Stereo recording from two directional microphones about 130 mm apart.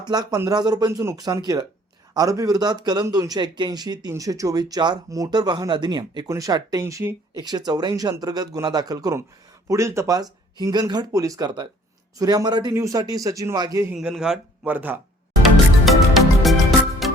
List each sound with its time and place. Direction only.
0.0 s a man's voice: 30° right (ahead or behind)
13.9 s speech: 5° right (ahead or behind)
15.4 s music: centre (ahead or behind)